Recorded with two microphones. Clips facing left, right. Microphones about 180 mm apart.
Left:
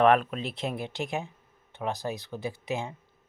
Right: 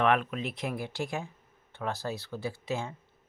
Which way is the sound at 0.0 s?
40° left (ahead or behind).